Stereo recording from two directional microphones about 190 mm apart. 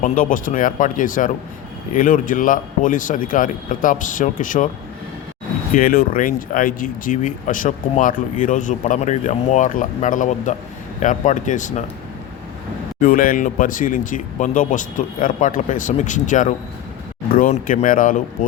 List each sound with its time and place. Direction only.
0.0 s speech: 45° left (ahead or behind)
5.7 s speech: 50° left (ahead or behind)
13.0 s speech: 50° left (ahead or behind)